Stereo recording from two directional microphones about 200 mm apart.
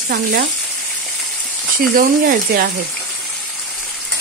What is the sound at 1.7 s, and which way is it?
Speech, 45° right (ahead or behind).